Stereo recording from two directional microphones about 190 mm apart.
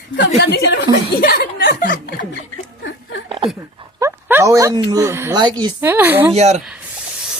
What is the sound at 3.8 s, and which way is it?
Dog, 20° right (ahead or behind).